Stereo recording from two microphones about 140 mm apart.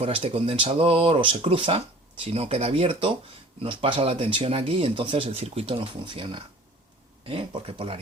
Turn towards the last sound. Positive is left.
turn(degrees=-40)  # may be behind; listen again after turning